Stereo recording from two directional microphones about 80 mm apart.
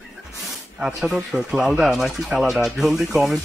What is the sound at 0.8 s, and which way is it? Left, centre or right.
Speech, centre.